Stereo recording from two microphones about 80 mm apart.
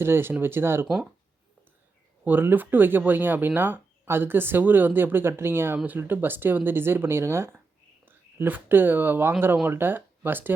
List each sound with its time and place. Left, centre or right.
0.0 s speech: right
2.2 s speech: right